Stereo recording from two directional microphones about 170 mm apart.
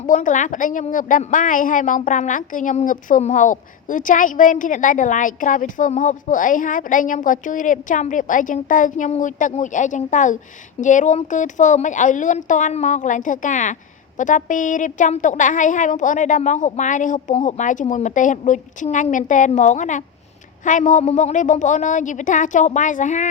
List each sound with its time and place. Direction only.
0.0 s a woman's voice: 50° left (ahead or behind)